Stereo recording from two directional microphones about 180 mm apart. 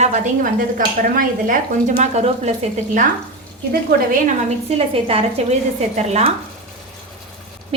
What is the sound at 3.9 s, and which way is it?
Speech, 60° right (ahead or behind).